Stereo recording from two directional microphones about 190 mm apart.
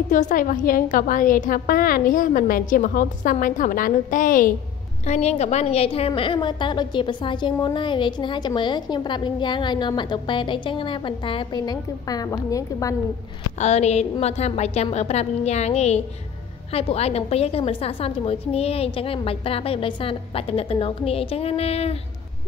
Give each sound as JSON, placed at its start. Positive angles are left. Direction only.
{"t": 0.1, "sound": "a woman's voice", "side_deg": 40}
{"t": 13.6, "sound": "a woman's voice", "side_deg": 35}